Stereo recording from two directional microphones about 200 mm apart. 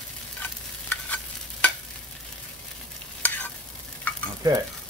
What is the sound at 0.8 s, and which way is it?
Stir, 10° left (ahead or behind).